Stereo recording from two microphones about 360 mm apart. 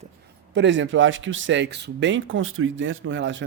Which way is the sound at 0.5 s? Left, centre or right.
Right.